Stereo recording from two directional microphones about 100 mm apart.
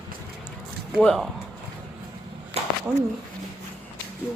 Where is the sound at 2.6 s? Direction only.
90° right.